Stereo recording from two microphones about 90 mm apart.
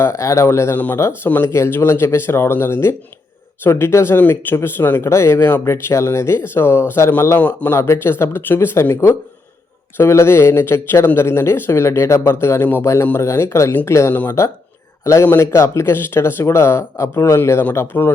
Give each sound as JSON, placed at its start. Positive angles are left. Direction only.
{"t": 0.0, "sound": "speech", "side_deg": 30}